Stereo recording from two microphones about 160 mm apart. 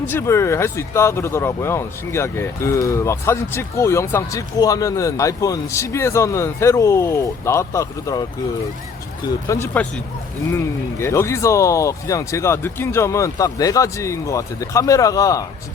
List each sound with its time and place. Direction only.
0.1 s speech: 15° left (ahead or behind)
9.5 s speech: 15° left (ahead or behind)
11.0 s speech: 15° left (ahead or behind)